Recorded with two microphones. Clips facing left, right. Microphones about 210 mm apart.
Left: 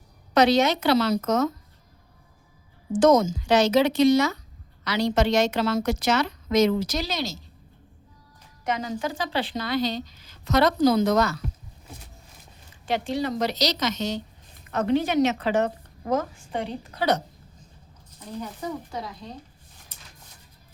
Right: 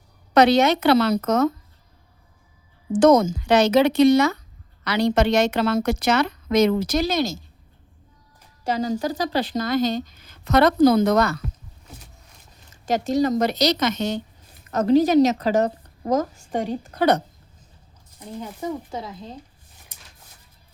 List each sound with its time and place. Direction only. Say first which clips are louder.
0.3 s a woman's voice: right 3 dB; 60° right (ahead or behind)
2.9 s a woman's voice: right 3 dB; 60° right (ahead or behind)
8.6 s speech: right 5 dB; 35° right (ahead or behind); by 11.3 s 60° right (ahead or behind)
12.7 s speech: right 5 dB; 40° right (ahead or behind)
14.7 s a woman's voice: right 6 dB; 40° right (ahead or behind)
18.9 s speech: right 2 dB; 25° right (ahead or behind)